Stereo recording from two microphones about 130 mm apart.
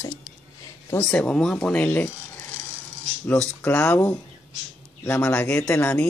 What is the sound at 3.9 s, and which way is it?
Speech, 20° left (ahead or behind).